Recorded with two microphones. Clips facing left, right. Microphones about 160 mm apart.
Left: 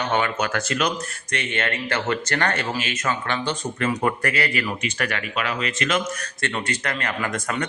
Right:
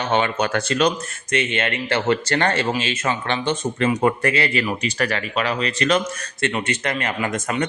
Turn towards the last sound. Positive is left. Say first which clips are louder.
# right 3 dB
turn(degrees=-20)  # may be behind; listen again after turning